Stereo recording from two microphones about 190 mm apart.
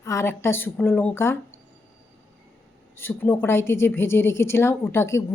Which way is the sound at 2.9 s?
10° left (ahead or behind).